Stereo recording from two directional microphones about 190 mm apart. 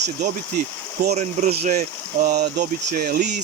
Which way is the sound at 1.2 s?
40° right (ahead or behind).